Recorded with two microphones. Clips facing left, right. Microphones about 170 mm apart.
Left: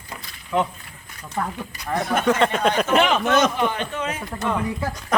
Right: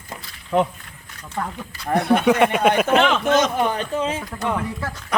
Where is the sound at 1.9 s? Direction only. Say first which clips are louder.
Right 6 dB; 65° right (ahead or behind).